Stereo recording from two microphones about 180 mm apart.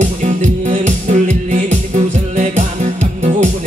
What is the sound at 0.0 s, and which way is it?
Music, 45° right (ahead or behind).